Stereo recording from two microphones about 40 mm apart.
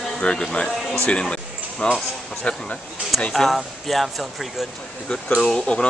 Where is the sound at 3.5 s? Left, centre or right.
Centre.